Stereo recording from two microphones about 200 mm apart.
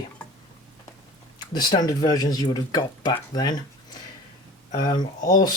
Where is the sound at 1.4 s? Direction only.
20° left (ahead or behind).